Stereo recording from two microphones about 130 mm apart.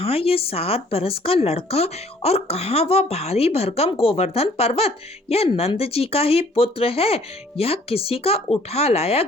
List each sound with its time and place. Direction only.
0.0 s speech: 50° left (ahead or behind)